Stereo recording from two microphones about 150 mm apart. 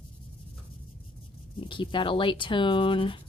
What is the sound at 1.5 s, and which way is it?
Speech, 35° left (ahead or behind).